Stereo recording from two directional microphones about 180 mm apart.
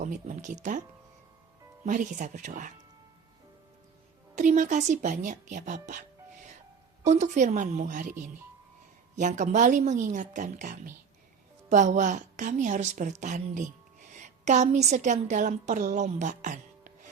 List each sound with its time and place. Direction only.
0.0 s speech: 45° right (ahead or behind)
1.8 s speech: 45° right (ahead or behind)
4.4 s a woman's voice: 45° right (ahead or behind)